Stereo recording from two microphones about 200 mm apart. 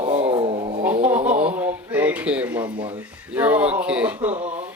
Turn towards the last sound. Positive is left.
turn(degrees=-35)  # may be behind; listen again after turning